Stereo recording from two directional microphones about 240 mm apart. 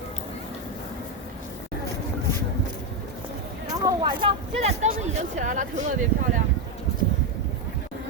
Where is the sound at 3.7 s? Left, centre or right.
Centre.